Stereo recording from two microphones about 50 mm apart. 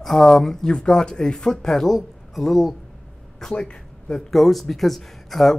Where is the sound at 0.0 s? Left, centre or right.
Centre.